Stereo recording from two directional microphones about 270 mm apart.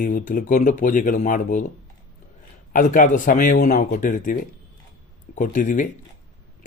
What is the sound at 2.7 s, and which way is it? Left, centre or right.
Speech, left.